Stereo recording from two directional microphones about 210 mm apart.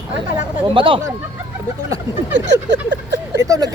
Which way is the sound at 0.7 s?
25° right (ahead or behind).